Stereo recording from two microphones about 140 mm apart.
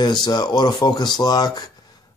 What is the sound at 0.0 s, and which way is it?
Speech, 30° left (ahead or behind).